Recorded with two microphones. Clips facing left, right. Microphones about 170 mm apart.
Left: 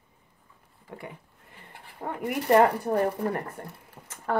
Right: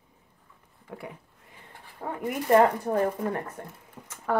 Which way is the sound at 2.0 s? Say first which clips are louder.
Even; 15° left (ahead or behind).